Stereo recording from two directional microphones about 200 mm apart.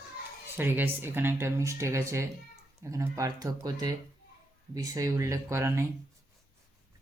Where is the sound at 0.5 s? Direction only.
10° right (ahead or behind).